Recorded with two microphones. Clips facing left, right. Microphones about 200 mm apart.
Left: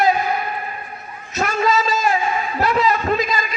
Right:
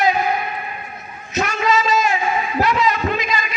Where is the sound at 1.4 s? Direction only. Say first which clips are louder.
Even; 30° left (ahead or behind).